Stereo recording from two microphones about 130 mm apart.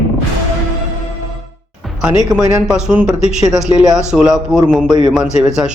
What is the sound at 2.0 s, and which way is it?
Speech, 5° right (ahead or behind).